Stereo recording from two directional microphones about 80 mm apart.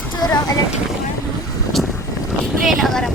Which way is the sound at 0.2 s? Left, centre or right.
Left.